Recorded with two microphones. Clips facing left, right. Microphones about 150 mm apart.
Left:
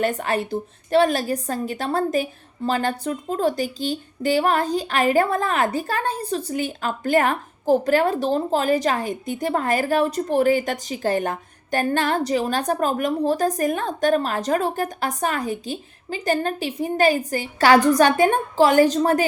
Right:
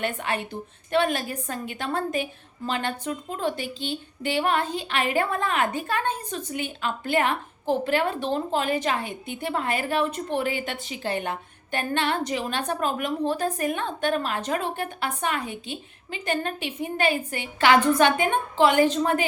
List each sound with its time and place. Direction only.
0.0 s a woman's voice: 40° left (ahead or behind)